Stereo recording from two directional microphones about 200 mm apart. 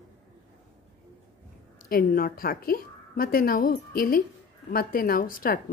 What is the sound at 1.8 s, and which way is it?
Speech, 45° left (ahead or behind).